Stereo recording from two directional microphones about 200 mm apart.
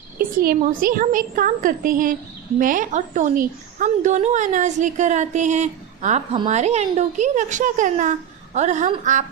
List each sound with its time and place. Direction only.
0.2 s a woman's voice: 45° right (ahead or behind)